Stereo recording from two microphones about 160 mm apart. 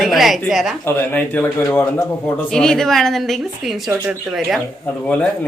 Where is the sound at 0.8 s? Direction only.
10° left (ahead or behind).